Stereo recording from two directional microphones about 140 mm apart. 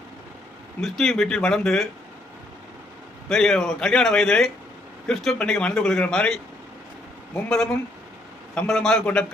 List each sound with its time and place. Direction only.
0.8 s speech: centre (ahead or behind)
3.2 s a man's voice: 5° left (ahead or behind)